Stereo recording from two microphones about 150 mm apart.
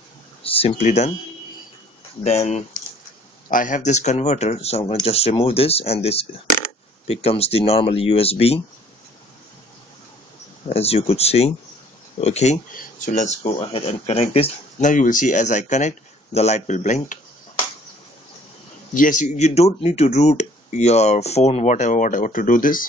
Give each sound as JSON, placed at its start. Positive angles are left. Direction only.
{"t": 0.4, "sound": "speech", "side_deg": 40}
{"t": 2.2, "sound": "speech", "side_deg": 45}
{"t": 3.4, "sound": "speech", "side_deg": 65}
{"t": 10.7, "sound": "speech", "side_deg": 40}
{"t": 12.7, "sound": "speech", "side_deg": 55}
{"t": 13.6, "sound": "speech", "side_deg": 40}
{"t": 14.9, "sound": "speech", "side_deg": 60}
{"t": 18.9, "sound": "speech", "side_deg": 60}